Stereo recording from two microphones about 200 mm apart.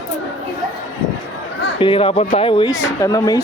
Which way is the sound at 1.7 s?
25° left (ahead or behind).